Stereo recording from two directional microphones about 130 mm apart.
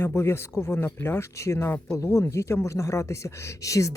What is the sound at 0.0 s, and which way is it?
Speech, 20° left (ahead or behind).